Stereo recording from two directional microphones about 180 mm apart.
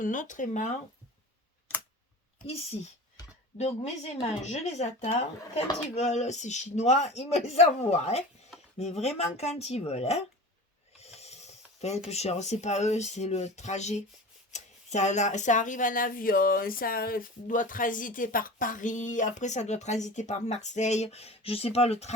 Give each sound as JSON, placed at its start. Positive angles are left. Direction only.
{"t": 0.0, "sound": "speech", "side_deg": 45}
{"t": 2.5, "sound": "speech", "side_deg": 35}